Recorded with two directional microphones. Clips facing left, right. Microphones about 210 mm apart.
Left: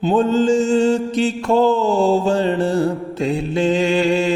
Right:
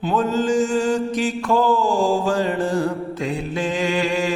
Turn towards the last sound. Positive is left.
turn(degrees=25)  # may be behind; listen again after turning